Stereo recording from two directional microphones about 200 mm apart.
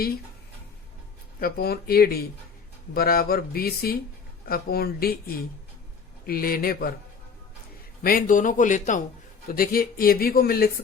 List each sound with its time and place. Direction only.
1.4 s speech: 50° left (ahead or behind)
6.2 s speech: 50° left (ahead or behind)
8.0 s speech: 45° left (ahead or behind)